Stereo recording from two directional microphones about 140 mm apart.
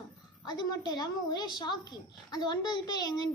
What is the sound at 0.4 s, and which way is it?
Speech, 30° left (ahead or behind).